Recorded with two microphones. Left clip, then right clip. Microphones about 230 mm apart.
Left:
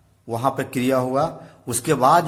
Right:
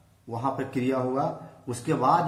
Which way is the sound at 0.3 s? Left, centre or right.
Left.